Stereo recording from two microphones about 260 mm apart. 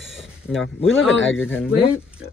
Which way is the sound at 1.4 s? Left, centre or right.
Centre.